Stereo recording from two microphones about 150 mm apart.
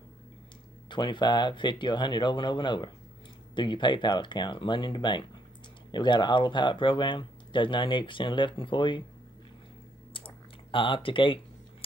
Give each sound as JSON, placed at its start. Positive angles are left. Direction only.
{"t": 0.8, "sound": "speech", "side_deg": 30}
{"t": 10.1, "sound": "typing", "side_deg": 35}